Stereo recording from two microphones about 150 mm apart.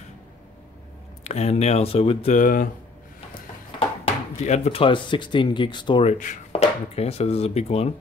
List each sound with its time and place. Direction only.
1.2 s speech: 45° left (ahead or behind)
2.3 s speech: 60° left (ahead or behind)
4.0 s speech: 40° left (ahead or behind)
6.0 s speech: 60° left (ahead or behind)
6.5 s speech: 45° left (ahead or behind)